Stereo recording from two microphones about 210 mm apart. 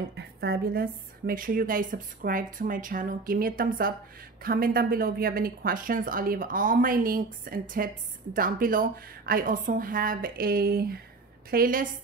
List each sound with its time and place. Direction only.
0.1 s a woman's voice: 50° right (ahead or behind)